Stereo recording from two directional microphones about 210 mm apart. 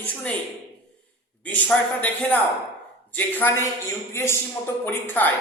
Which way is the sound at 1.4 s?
5° left (ahead or behind).